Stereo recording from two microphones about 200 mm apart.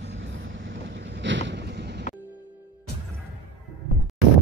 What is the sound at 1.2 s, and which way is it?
Vehicle, 65° right (ahead or behind).